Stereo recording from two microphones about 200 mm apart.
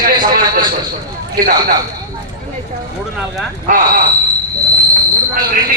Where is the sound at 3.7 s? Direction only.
45° right (ahead or behind).